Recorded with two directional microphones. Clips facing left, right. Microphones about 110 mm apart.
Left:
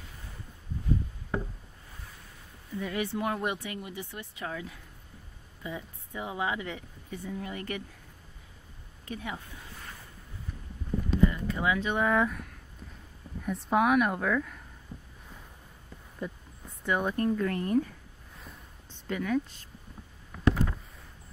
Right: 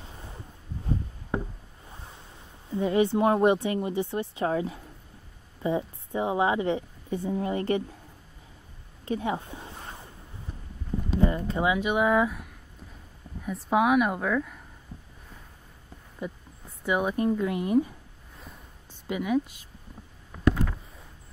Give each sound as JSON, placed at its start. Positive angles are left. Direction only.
{"t": 1.9, "sound": "waves", "side_deg": -25}
{"t": 2.7, "sound": "a woman's voice", "side_deg": -25}
{"t": 9.0, "sound": "a sound", "side_deg": -30}
{"t": 11.1, "sound": "a woman's voice", "side_deg": -30}
{"t": 16.2, "sound": "speech", "side_deg": -10}